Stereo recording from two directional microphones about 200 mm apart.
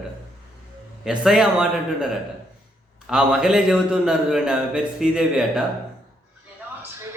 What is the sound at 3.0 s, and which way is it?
A man's voice, 5° right (ahead or behind).